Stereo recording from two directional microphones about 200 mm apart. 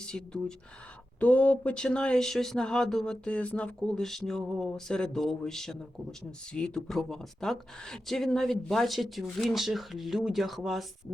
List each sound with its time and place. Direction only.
0.0 s speech: 5° left (ahead or behind)